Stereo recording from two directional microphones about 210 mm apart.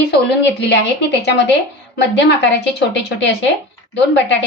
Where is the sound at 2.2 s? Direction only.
55° left (ahead or behind).